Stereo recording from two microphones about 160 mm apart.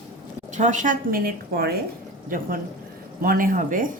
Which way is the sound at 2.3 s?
60° right (ahead or behind).